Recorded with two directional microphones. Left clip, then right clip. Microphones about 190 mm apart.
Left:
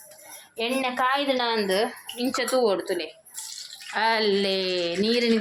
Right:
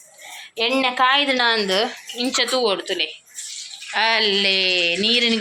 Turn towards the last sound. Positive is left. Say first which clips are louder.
# right 5 dB
turn(degrees=20)  # may be behind; listen again after turning